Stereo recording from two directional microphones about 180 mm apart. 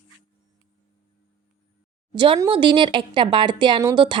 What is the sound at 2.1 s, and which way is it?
A woman's voice, 30° right (ahead or behind).